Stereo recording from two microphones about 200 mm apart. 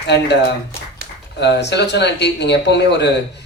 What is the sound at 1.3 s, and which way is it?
Speech, 60° left (ahead or behind).